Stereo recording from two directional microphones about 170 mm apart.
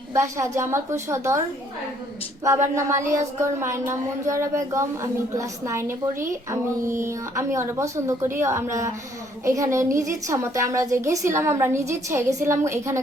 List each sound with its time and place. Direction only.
0.1 s a woman's voice: 15° right (ahead or behind)
2.7 s a woman's voice: 15° right (ahead or behind)